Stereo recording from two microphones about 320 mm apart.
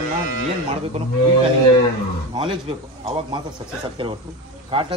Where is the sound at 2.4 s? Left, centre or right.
Centre.